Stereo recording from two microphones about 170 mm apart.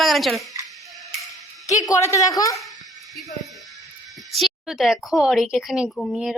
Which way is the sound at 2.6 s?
Centre (ahead or behind).